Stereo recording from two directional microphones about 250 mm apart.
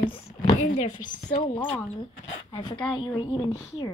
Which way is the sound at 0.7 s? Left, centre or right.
Left.